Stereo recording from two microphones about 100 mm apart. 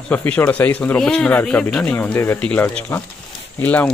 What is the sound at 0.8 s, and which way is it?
Speech, 10° left (ahead or behind).